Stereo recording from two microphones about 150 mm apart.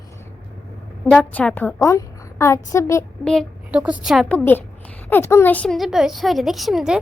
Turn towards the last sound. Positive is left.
turn(degrees=-5)  # may be behind; listen again after turning